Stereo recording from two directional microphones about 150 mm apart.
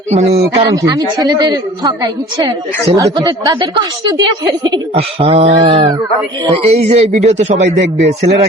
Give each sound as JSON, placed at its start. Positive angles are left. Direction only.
{"t": 0.1, "sound": "a man's voice", "side_deg": -45}
{"t": 0.5, "sound": "a woman's voice", "side_deg": -25}
{"t": 4.9, "sound": "a sound", "side_deg": -45}
{"t": 6.8, "sound": "a man's voice", "side_deg": -45}